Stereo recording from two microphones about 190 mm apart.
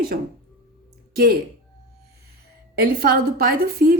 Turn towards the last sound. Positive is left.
turn(degrees=-55)  # may be behind; listen again after turning